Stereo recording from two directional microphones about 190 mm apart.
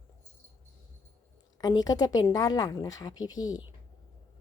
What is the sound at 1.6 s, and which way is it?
Speech, 20° left (ahead or behind).